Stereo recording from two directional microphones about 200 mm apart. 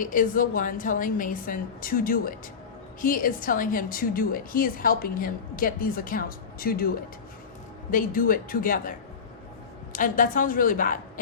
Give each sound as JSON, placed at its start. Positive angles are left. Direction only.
{"t": 0.0, "sound": "a woman's voice", "side_deg": 40}